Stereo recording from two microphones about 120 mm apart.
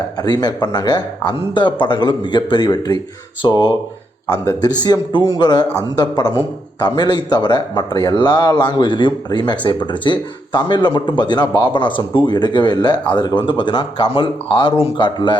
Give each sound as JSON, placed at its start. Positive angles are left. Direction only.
{"t": 0.2, "sound": "a man's voice", "side_deg": 35}
{"t": 4.8, "sound": "a man's voice", "side_deg": 35}